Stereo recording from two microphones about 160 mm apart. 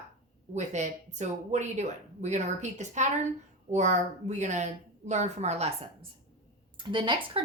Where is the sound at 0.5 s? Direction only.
45° right (ahead or behind).